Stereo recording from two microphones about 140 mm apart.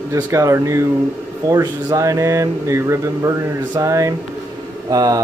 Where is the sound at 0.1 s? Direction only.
20° right (ahead or behind).